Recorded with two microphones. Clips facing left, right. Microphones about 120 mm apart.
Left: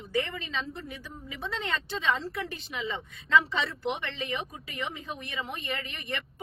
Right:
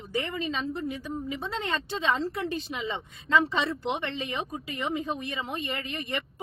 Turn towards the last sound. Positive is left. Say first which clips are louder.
# right 3 dB
turn(degrees=-20)  # may be behind; listen again after turning